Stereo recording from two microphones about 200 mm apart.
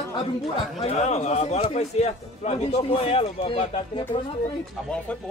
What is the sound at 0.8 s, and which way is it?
A man's voice, 35° left (ahead or behind).